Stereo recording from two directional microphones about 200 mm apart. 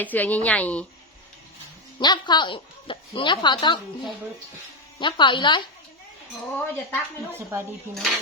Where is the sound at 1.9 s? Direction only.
20° left (ahead or behind).